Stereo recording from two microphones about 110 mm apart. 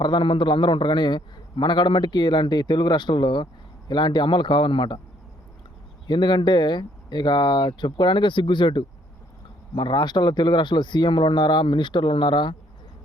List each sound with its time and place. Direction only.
0.0 s a man's voice: 45° left (ahead or behind)
6.1 s a man's voice: 45° left (ahead or behind)